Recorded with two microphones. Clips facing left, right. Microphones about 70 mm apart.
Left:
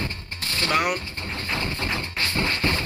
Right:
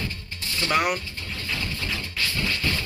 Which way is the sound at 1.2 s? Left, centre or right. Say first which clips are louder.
Left 3 dB; left.